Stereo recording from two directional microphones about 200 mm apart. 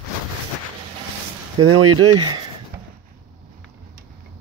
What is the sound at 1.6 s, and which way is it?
Speech, 90° right.